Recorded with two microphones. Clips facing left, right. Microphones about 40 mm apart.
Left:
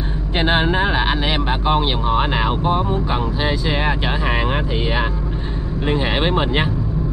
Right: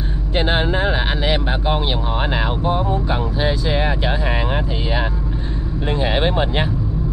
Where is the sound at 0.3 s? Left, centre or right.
Centre.